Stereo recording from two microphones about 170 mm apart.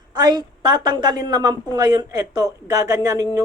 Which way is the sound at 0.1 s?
25° right (ahead or behind).